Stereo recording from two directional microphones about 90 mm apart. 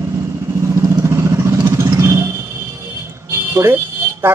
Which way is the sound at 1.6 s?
30° right (ahead or behind).